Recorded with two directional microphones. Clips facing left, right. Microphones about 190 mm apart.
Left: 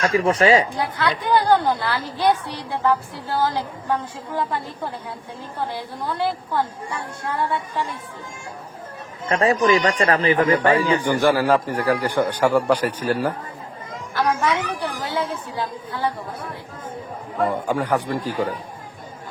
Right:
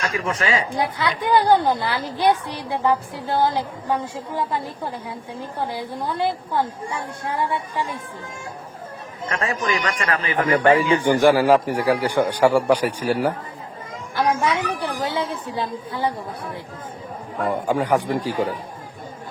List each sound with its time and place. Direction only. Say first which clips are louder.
0.0 s speech: left 7 dB; 35° left (ahead or behind)
0.7 s a woman's voice: even; 15° right (ahead or behind)
9.3 s speech: left 7 dB; 35° left (ahead or behind)
11.0 s a woman's voice: right 3 dB; 15° right (ahead or behind)
17.7 s a woman's voice: right 2 dB; 15° right (ahead or behind)